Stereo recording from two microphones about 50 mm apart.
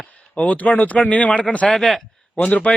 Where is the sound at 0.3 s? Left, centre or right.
Left.